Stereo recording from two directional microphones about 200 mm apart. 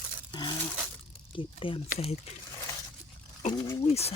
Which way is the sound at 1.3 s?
25° left (ahead or behind).